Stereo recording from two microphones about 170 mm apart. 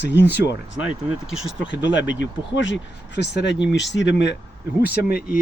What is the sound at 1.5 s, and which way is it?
Speech, 90° left.